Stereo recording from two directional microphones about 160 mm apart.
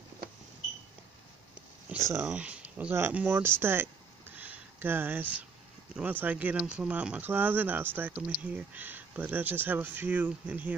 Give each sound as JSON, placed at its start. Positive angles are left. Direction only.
{"t": 1.9, "sound": "speech", "side_deg": -15}
{"t": 4.4, "sound": "a sound", "side_deg": -10}
{"t": 5.9, "sound": "speech", "side_deg": -10}